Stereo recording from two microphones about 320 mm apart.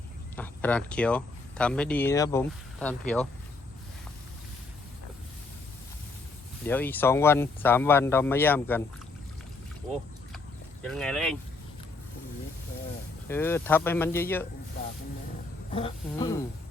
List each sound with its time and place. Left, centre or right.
0.3 s speech: centre
6.7 s speech: centre
10.8 s speech: centre
13.2 s speech: centre
15.7 s speech: centre